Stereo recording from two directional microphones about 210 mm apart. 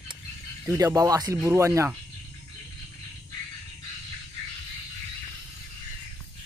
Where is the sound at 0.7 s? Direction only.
15° right (ahead or behind).